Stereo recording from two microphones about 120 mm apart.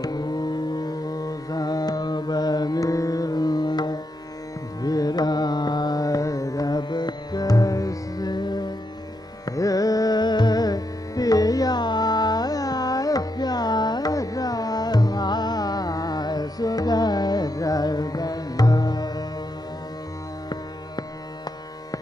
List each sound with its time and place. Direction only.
0.0 s music: 35° left (ahead or behind)
4.8 s carnatic music: 30° left (ahead or behind)
9.6 s music: 30° left (ahead or behind)